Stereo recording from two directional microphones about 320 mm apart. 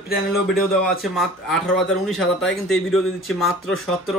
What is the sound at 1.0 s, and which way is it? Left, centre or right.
Speech, centre.